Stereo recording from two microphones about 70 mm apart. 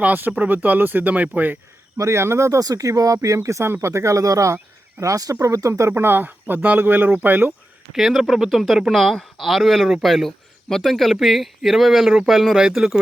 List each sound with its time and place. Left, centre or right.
0.0 s speech: right
2.0 s speech: right
2.6 s speech: right
5.9 s speech: right
7.9 s speech: centre